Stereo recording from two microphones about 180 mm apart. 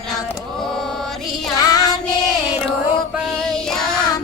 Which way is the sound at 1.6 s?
20° left (ahead or behind).